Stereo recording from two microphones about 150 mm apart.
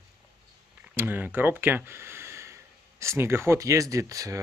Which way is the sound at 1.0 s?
15° right (ahead or behind).